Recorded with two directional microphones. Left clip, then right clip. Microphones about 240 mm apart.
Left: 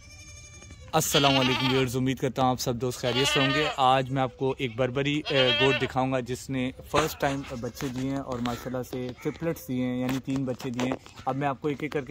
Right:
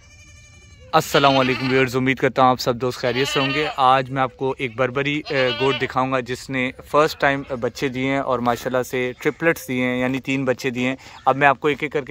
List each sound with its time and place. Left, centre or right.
0.9 s speech: centre
7.3 s speech: right
9.7 s speech: centre
11.2 s speech: centre